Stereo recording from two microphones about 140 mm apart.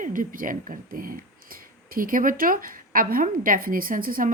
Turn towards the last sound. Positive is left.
turn(degrees=-90)